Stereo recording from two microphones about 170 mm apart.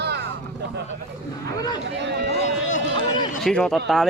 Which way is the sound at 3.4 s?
Centre (ahead or behind).